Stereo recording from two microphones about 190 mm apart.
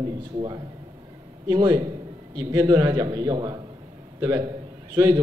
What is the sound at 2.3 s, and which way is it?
A man's voice, 20° right (ahead or behind).